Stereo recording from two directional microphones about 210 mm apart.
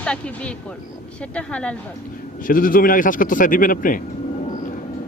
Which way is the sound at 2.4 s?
40° left (ahead or behind).